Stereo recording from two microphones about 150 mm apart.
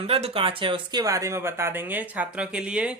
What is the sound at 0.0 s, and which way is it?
Speech, 40° right (ahead or behind).